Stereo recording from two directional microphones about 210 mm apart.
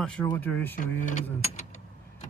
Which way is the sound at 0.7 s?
40° left (ahead or behind).